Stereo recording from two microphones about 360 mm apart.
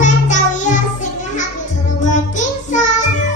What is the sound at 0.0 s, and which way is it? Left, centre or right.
Music, left.